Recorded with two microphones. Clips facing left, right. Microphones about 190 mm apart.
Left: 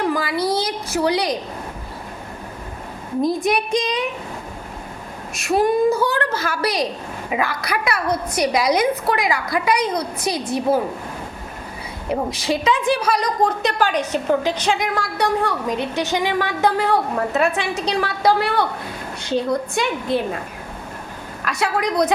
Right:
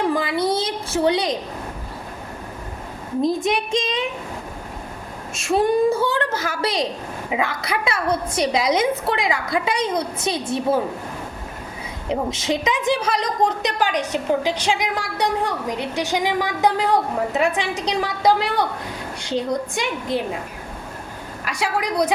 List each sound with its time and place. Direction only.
0.1 s a sound: 20° right (ahead or behind)
3.2 s a woman's voice: 25° right (ahead or behind)
5.3 s a woman's voice: 25° right (ahead or behind)
12.0 s a woman's voice: 20° right (ahead or behind)
19.7 s a woman's voice: 15° right (ahead or behind)
21.4 s a woman's voice: 10° right (ahead or behind)